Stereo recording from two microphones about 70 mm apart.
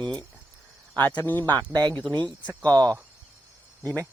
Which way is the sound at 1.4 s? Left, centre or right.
Right.